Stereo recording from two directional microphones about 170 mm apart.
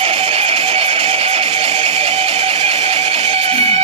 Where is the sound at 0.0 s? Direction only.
35° right (ahead or behind).